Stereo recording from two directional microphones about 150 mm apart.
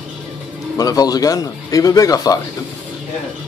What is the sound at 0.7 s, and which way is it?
Speech, 25° left (ahead or behind).